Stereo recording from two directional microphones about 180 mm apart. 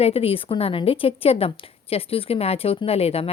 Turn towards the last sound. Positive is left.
turn(degrees=35)  # may be behind; listen again after turning